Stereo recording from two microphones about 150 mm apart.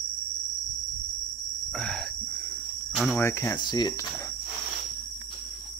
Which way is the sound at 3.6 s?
30° left (ahead or behind).